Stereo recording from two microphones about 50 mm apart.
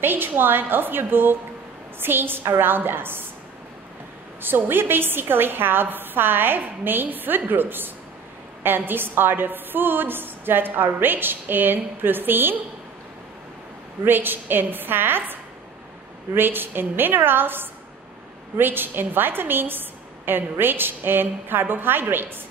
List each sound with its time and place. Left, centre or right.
0.0 s a woman's voice: right
4.4 s a woman's voice: right
14.0 s a woman's voice: right
16.3 s a woman's voice: right